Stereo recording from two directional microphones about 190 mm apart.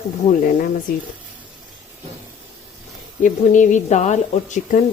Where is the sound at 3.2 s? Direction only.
40° left (ahead or behind).